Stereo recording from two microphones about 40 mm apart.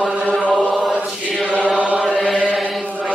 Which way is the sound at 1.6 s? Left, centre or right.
Right.